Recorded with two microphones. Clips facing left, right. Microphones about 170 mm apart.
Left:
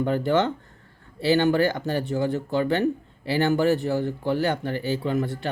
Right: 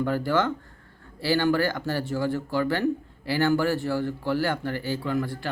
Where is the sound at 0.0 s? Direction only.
20° left (ahead or behind).